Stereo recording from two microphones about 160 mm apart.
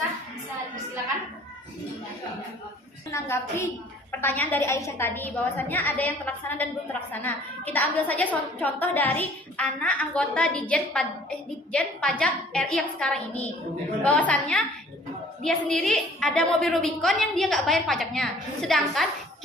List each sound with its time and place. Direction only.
3.1 s a woman's voice: 15° left (ahead or behind); by 19.0 s centre (ahead or behind)